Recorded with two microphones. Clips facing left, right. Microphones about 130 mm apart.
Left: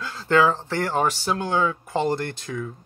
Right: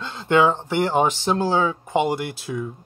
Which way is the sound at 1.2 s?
30° right (ahead or behind).